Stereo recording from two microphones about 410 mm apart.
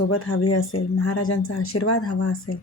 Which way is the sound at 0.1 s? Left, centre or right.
Left.